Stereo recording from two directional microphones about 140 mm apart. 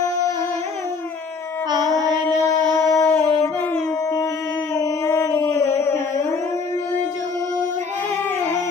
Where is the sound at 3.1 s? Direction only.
20° left (ahead or behind).